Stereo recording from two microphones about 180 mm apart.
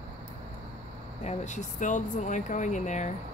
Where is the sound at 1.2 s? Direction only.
40° left (ahead or behind).